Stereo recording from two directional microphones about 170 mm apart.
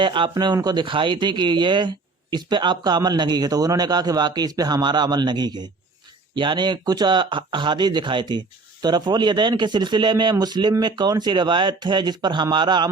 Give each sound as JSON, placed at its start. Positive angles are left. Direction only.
{"t": 0.0, "sound": "speech", "side_deg": -30}